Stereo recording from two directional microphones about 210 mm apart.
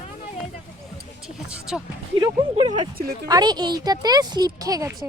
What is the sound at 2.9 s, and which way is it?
Speech, 45° right (ahead or behind).